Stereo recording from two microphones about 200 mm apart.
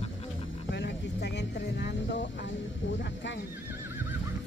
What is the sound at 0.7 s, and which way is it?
Speech, 60° left (ahead or behind).